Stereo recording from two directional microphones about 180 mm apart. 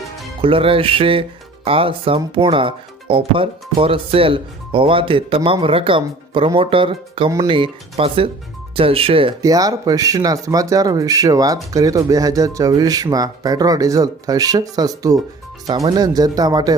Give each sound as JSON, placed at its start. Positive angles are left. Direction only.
{"t": 0.4, "sound": "speech", "side_deg": -30}
{"t": 9.4, "sound": "speech", "side_deg": -20}